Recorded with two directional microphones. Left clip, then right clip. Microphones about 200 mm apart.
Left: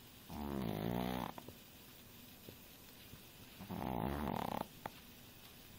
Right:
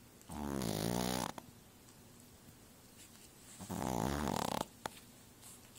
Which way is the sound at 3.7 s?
15° right (ahead or behind).